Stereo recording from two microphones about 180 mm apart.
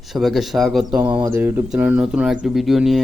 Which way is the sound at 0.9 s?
25° right (ahead or behind).